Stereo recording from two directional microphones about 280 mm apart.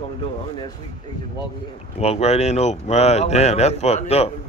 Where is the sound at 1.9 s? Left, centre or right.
Left.